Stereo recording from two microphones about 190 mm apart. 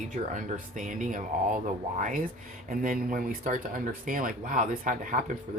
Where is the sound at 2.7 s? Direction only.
45° right (ahead or behind).